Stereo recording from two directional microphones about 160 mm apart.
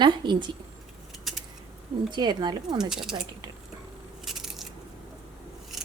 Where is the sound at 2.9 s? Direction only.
5° right (ahead or behind).